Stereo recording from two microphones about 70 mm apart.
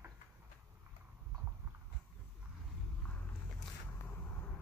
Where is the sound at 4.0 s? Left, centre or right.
Left.